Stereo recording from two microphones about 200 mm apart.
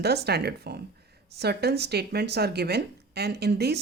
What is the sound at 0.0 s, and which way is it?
Speech, 55° right (ahead or behind).